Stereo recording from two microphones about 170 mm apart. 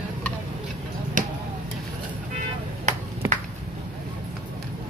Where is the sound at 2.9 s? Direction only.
45° right (ahead or behind).